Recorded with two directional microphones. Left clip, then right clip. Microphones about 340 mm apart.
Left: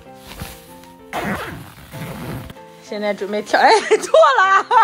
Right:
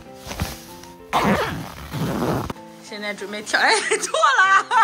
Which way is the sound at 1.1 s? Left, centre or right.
Centre.